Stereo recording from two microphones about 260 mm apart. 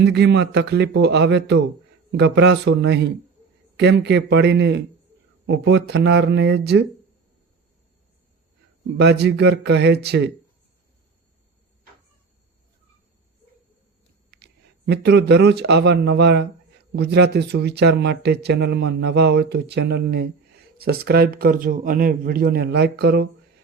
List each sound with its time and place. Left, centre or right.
0.0 s speech: right
9.0 s speech: right
14.3 s speech: right